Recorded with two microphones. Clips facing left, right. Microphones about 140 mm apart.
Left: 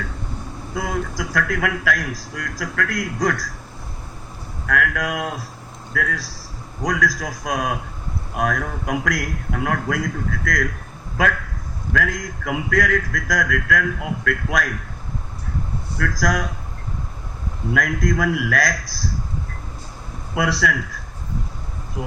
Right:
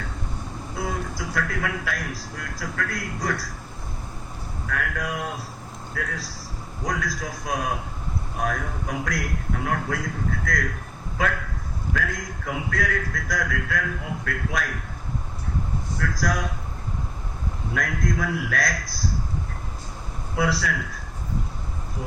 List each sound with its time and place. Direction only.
0.8 s a man's voice: 90° left
4.7 s a man's voice: 90° left
11.9 s a man's voice: 90° left
16.0 s a man's voice: 90° left
17.7 s a man's voice: 90° left
20.3 s a man's voice: 85° left